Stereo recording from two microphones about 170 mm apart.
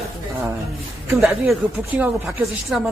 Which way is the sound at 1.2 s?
Centre (ahead or behind).